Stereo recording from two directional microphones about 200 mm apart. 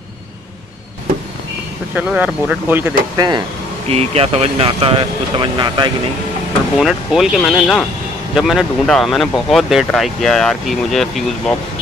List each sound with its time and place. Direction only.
2.0 s speech: 5° right (ahead or behind)
3.2 s speech: 20° right (ahead or behind)
3.9 s speech: 30° right (ahead or behind)
6.8 s speech: centre (ahead or behind)